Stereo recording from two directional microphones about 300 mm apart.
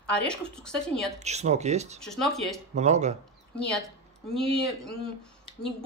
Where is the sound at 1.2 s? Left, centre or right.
Right.